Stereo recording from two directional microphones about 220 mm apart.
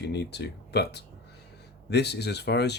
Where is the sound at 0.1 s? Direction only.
50° left (ahead or behind).